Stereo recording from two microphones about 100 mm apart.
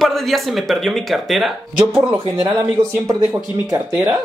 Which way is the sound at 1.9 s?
25° right (ahead or behind).